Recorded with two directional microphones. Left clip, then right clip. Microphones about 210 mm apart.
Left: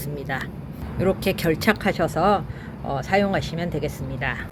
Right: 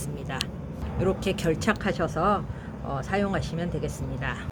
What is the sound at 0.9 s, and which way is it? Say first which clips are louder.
Speech: left 4 dB; 10° left (ahead or behind).